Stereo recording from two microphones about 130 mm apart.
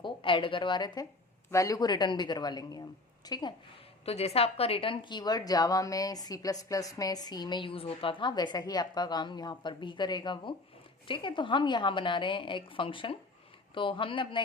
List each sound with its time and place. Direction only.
0.0 s a woman's voice: 40° left (ahead or behind)
4.0 s a woman's voice: 50° left (ahead or behind)